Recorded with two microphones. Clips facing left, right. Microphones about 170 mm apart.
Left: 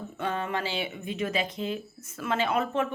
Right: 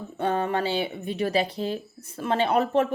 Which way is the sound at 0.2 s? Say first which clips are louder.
Right 6 dB; 35° right (ahead or behind).